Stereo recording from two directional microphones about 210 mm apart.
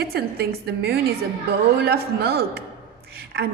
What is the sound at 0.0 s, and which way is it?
A woman's voice, 50° right (ahead or behind).